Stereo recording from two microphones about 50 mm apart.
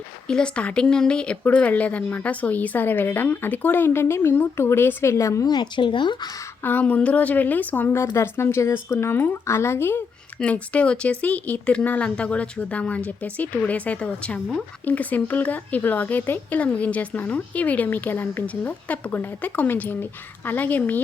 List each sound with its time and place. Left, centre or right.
0.3 s speech: centre
1.5 s a woman's voice: left
5.0 s a woman's voice: left
6.6 s speech: left
6.8 s a woman's voice: left
7.9 s speech: left
9.5 s speech: left
10.4 s a woman's voice: left
16.5 s a woman's voice: left